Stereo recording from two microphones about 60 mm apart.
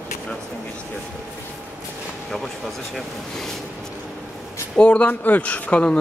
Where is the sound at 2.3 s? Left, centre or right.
Centre.